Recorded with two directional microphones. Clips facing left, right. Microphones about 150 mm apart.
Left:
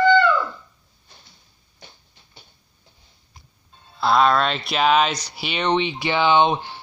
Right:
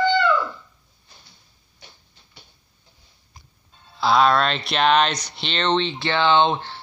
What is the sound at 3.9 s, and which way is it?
Speech, centre (ahead or behind).